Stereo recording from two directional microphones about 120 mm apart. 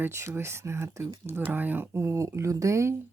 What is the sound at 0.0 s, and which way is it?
Speech, 20° right (ahead or behind).